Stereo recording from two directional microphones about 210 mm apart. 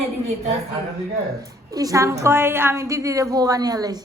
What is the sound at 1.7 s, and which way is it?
A woman's voice, 15° right (ahead or behind).